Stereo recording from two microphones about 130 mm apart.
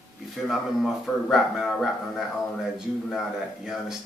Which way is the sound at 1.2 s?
Centre (ahead or behind).